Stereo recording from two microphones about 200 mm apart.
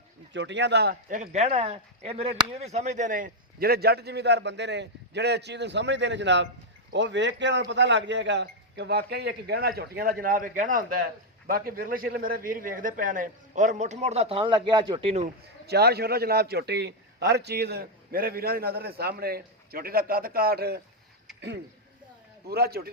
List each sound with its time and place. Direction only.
0.3 s speech: 60° right (ahead or behind)
1.2 s a man's voice: 35° right (ahead or behind)
15.6 s speech: 55° right (ahead or behind)
22.4 s speech: 50° right (ahead or behind)